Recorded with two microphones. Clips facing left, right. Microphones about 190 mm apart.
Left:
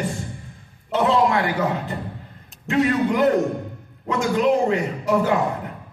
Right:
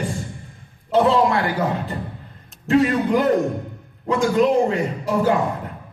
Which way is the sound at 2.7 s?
35° right (ahead or behind).